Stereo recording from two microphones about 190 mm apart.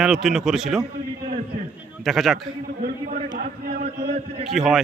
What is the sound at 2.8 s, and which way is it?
A man's voice, 50° right (ahead or behind).